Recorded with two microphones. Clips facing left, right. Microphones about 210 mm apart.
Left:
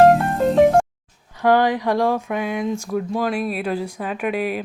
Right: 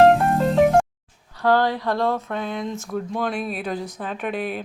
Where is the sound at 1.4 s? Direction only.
15° left (ahead or behind).